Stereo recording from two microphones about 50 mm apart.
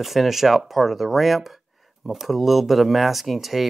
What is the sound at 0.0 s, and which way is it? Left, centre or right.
Speech, centre.